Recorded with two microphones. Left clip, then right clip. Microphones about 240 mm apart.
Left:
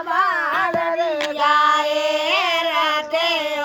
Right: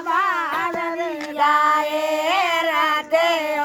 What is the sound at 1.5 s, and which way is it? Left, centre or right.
Child singing, centre.